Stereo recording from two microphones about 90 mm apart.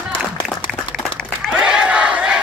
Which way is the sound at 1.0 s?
10° right (ahead or behind).